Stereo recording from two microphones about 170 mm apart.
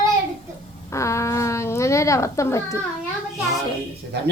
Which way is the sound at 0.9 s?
15° left (ahead or behind).